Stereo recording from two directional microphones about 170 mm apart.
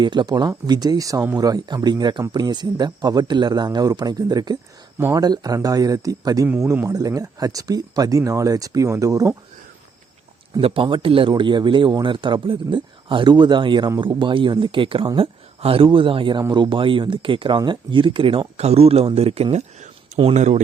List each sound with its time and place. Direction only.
0.0 s speech: 25° right (ahead or behind)
10.6 s speech: 30° right (ahead or behind)